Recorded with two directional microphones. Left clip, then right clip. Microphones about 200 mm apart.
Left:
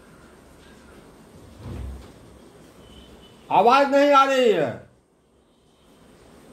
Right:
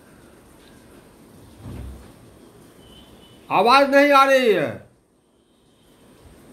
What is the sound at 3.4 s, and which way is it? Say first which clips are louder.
A man's voice: right 1 dB; 35° right (ahead or behind).